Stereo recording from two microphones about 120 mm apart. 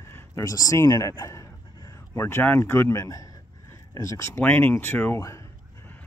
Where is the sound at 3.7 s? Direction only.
25° left (ahead or behind).